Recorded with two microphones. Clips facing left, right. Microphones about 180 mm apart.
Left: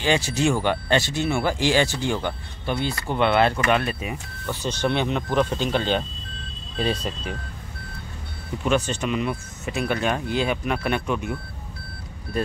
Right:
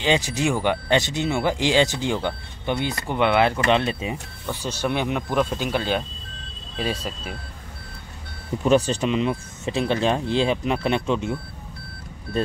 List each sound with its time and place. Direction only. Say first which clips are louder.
0.0 s speech: even; 15° right (ahead or behind)
3.6 s speech: right 2 dB; 25° right (ahead or behind)
4.5 s speech: left 1 dB; 10° right (ahead or behind)
8.6 s speech: right 4 dB; 35° right (ahead or behind)